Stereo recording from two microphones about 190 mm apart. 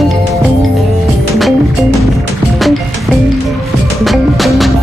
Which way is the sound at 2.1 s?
Centre (ahead or behind).